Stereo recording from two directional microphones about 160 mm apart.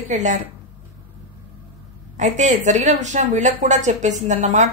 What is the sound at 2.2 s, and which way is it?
Speech, 50° right (ahead or behind).